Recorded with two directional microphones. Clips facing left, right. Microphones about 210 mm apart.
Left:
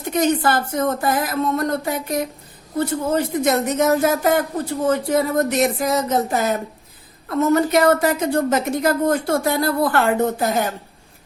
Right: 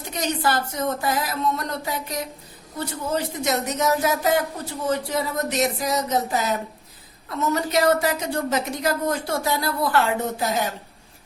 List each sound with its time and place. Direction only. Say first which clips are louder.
0.1 s a woman's voice: left 6 dB; 50° left (ahead or behind)